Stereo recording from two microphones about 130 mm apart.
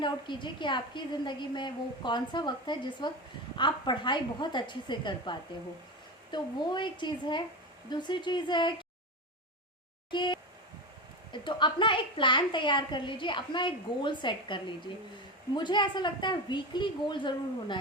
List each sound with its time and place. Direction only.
0.0 s a woman's voice: 35° left (ahead or behind)
10.1 s a sound: 35° left (ahead or behind)
11.3 s a woman's voice: 40° left (ahead or behind)